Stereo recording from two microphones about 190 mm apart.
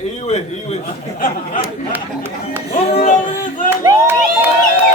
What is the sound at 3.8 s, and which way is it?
Speech, 15° right (ahead or behind).